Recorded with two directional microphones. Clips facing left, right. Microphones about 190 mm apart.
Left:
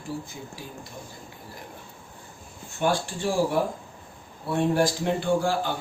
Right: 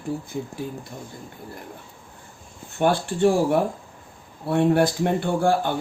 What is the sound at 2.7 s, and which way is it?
Speech, 55° right (ahead or behind).